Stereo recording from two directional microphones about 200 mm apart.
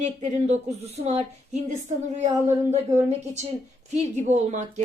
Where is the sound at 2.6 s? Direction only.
35° right (ahead or behind).